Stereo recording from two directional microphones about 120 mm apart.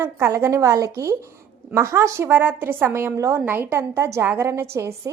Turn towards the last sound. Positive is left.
turn(degrees=-25)  # may be behind; listen again after turning